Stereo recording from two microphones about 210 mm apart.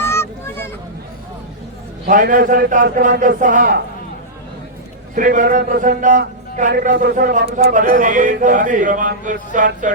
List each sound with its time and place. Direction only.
0.0 s a sound: 10° left (ahead or behind)
2.0 s a man's voice: 40° right (ahead or behind)
5.1 s a man's voice: 40° right (ahead or behind)